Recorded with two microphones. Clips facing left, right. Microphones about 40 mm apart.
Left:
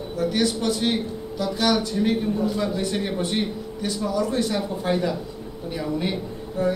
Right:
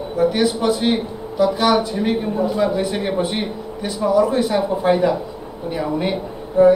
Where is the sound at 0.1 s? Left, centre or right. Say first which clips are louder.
Right 6 dB; centre.